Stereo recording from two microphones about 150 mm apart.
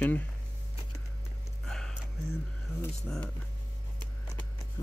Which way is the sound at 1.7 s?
5° left (ahead or behind).